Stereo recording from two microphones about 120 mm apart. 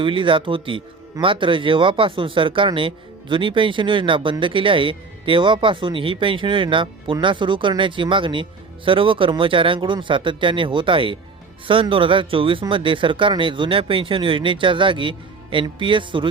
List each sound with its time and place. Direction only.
0.0 s speech: 45° right (ahead or behind)